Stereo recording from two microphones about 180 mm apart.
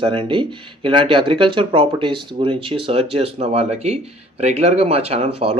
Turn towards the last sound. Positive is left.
turn(degrees=-35)  # may be behind; listen again after turning